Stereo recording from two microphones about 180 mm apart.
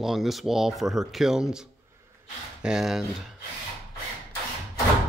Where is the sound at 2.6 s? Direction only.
5° right (ahead or behind).